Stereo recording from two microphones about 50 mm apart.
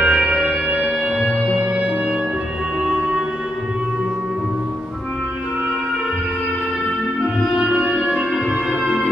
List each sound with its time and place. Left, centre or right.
0.0 s music: right
2.8 s music: centre
7.5 s music: right